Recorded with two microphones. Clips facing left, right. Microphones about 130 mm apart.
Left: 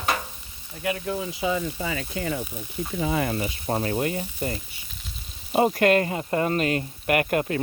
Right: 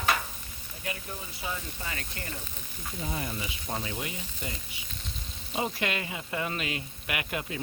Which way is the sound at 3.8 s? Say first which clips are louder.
Left 11 dB; 50° left (ahead or behind).